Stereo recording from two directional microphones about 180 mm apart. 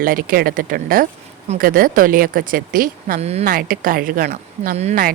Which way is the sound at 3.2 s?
35° right (ahead or behind).